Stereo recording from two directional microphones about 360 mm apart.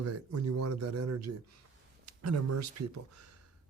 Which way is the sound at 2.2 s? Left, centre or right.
Right.